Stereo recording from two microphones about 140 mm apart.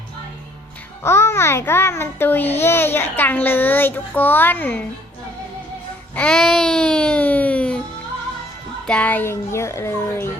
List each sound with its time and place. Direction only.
1.0 s a child's voice: 20° left (ahead or behind)
6.1 s a child's voice: 5° left (ahead or behind)
8.9 s a child's voice: 10° left (ahead or behind)